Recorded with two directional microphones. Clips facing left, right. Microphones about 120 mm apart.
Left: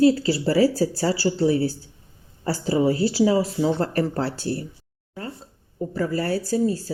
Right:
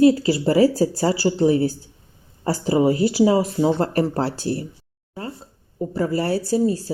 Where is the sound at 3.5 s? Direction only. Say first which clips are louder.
Right 3 dB; 40° right (ahead or behind).